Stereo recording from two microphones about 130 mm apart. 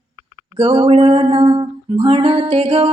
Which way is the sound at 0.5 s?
45° right (ahead or behind).